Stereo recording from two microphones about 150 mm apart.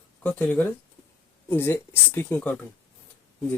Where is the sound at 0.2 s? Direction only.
10° left (ahead or behind).